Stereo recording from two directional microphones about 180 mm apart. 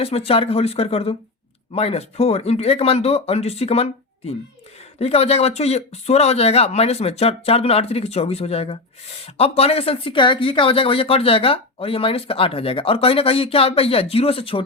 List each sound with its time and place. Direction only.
0.0 s speech: 35° left (ahead or behind)